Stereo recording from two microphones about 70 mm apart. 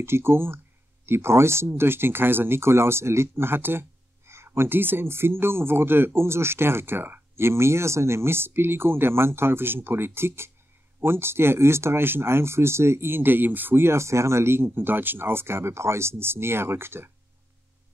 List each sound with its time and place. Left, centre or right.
0.0 s speech: right